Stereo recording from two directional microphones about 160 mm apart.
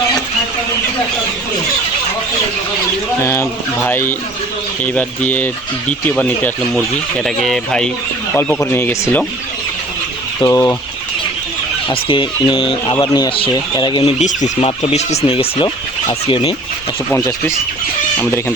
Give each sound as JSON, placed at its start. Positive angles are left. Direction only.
{"t": 3.2, "sound": "speech", "side_deg": 15}
{"t": 10.4, "sound": "speech", "side_deg": 20}
{"t": 11.9, "sound": "speech", "side_deg": 30}
{"t": 14.0, "sound": "speech", "side_deg": 45}
{"t": 18.2, "sound": "speech", "side_deg": 10}